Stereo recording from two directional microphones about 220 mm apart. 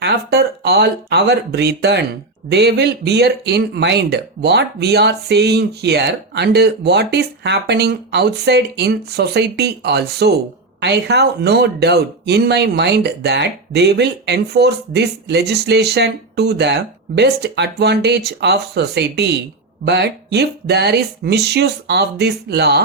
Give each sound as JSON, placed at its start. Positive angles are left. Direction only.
{"t": 0.0, "sound": "speech", "side_deg": -50}